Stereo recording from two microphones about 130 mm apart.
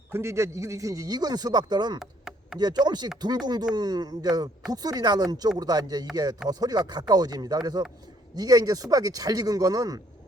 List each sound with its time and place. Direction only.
0.1 s a man's voice: 20° right (ahead or behind)
2.0 s chop: 5° right (ahead or behind)
2.6 s a man's voice: 35° right (ahead or behind)